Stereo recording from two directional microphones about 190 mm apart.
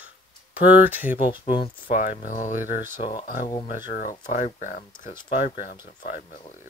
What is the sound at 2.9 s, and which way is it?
Speech, 25° left (ahead or behind).